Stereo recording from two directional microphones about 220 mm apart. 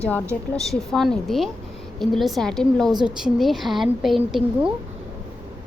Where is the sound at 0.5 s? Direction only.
Centre (ahead or behind).